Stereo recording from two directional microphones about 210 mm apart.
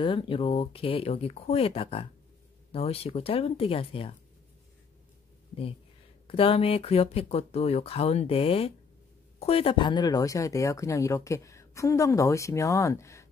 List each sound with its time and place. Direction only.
0.0 s speech: 25° left (ahead or behind)
6.2 s speech: 25° left (ahead or behind)